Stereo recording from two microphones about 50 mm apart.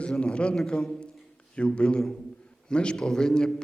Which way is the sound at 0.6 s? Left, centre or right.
Centre.